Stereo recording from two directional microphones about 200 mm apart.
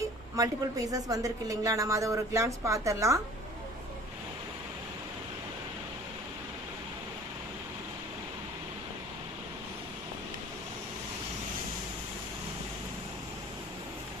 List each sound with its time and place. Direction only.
0.3 s a woman's voice: 15° right (ahead or behind)